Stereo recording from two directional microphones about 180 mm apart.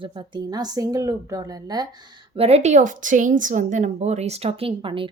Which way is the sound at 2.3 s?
35° right (ahead or behind).